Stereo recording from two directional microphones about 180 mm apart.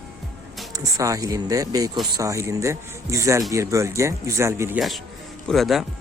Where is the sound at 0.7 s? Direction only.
20° right (ahead or behind).